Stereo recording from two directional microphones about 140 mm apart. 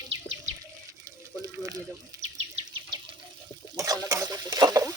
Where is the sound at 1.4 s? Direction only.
25° right (ahead or behind).